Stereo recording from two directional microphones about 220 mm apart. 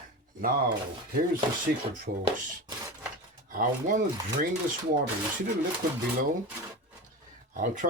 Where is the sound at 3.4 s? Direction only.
35° right (ahead or behind).